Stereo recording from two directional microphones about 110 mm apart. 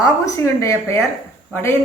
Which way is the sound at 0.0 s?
30° left (ahead or behind).